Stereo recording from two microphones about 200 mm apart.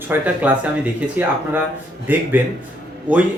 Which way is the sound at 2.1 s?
10° right (ahead or behind).